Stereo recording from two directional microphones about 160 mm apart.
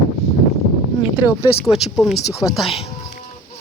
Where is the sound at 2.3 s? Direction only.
20° left (ahead or behind).